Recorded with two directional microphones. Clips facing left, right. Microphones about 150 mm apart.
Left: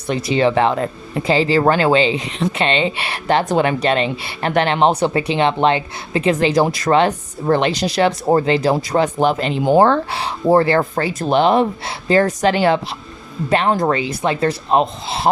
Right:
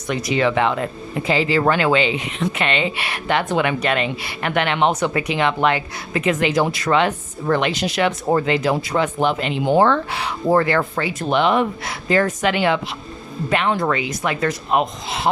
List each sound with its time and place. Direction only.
0.1 s speech: 30° left (ahead or behind)